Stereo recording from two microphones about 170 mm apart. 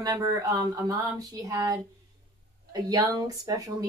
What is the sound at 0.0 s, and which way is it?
Speech, 20° right (ahead or behind).